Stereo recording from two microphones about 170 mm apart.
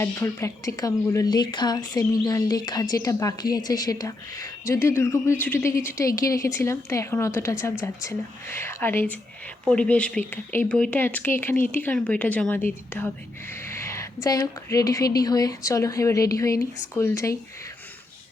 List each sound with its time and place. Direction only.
0.0 s speech: 15° left (ahead or behind)